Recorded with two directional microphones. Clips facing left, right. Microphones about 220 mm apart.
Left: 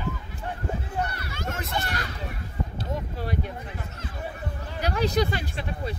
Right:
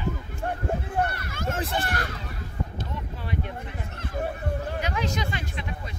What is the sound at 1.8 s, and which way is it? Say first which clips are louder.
Speech: right 2 dB; 50° right (ahead or behind).